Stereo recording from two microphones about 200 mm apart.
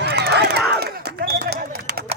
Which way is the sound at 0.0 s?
55° right (ahead or behind).